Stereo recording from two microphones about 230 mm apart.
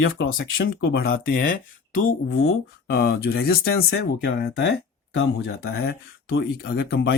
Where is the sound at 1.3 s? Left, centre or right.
Left.